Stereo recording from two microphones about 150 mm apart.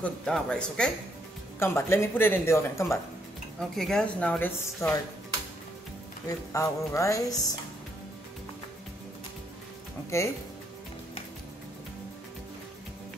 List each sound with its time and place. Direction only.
0.0 s a woman's voice: 5° left (ahead or behind)
3.5 s a woman's voice: 5° left (ahead or behind)
6.5 s music: 20° left (ahead or behind)
10.1 s music: 20° left (ahead or behind)